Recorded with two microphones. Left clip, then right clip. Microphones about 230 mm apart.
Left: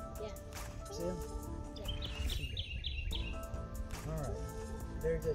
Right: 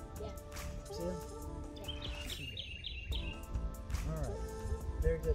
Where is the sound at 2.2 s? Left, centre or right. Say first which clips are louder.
Left 1 dB; left.